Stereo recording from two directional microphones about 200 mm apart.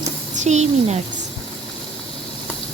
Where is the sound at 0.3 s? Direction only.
35° right (ahead or behind).